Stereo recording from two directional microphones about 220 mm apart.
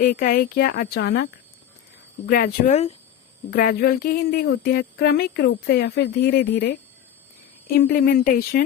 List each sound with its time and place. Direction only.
0.0 s speech: 40° left (ahead or behind)
3.5 s speech: 45° left (ahead or behind)